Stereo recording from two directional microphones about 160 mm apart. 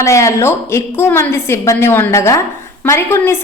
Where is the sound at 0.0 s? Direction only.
20° left (ahead or behind).